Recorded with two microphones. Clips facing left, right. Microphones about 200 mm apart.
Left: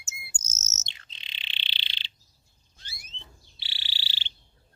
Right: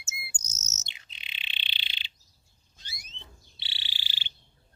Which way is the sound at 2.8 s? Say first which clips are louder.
Even; 20° right (ahead or behind).